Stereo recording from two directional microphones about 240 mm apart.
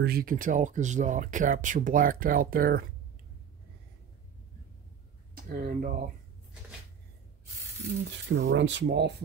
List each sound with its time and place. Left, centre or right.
0.0 s speech: right
5.3 s speech: right
8.3 s speech: right